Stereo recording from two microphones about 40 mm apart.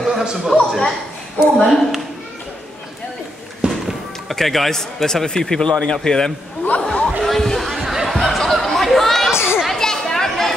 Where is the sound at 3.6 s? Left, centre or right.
Right.